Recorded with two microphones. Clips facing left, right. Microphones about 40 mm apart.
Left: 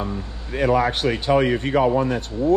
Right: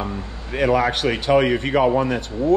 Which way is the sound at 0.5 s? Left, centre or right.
Right.